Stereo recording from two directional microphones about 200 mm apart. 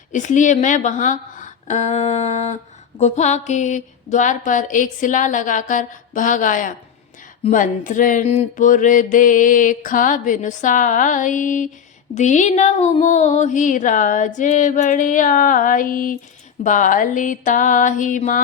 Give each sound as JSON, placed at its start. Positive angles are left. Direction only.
{"t": 0.1, "sound": "mantra", "side_deg": 40}